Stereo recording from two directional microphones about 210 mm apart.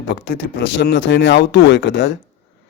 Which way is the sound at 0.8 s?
60° left (ahead or behind).